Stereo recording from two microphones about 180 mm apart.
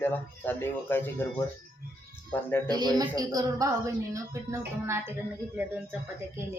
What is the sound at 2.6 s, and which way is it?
A woman's voice, 25° right (ahead or behind).